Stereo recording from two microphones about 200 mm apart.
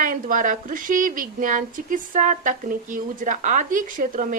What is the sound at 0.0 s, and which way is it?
A woman's voice, 40° right (ahead or behind).